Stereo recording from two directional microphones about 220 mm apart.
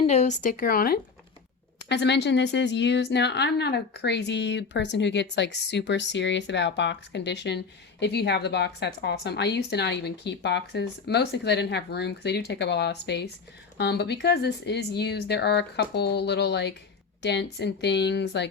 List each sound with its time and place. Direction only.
0.0 s speech: 30° left (ahead or behind)
1.9 s a woman's voice: 50° left (ahead or behind)